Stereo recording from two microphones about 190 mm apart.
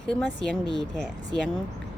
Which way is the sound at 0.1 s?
5° left (ahead or behind).